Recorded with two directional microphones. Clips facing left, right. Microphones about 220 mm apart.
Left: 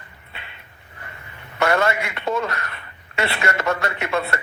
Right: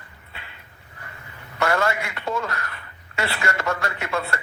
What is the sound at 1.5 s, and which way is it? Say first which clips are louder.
A man's voice: left 3 dB; 20° left (ahead or behind).